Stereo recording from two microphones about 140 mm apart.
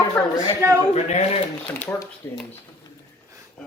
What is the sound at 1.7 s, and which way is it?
Speech, 15° left (ahead or behind).